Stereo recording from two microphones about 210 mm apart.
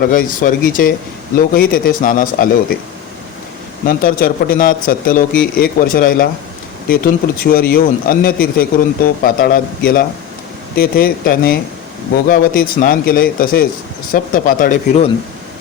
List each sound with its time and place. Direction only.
0.0 s speech: 40° left (ahead or behind)
3.8 s speech: 45° left (ahead or behind)